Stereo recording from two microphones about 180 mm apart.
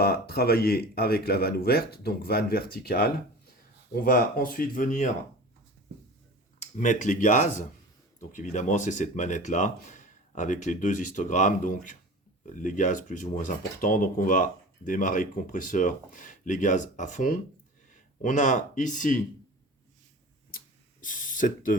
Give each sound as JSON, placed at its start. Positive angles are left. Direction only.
{"t": 0.0, "sound": "speech", "side_deg": 60}
{"t": 6.6, "sound": "speech", "side_deg": 40}
{"t": 21.0, "sound": "speech", "side_deg": 50}